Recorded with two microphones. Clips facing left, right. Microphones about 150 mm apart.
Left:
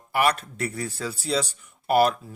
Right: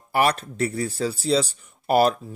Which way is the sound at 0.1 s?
35° right (ahead or behind).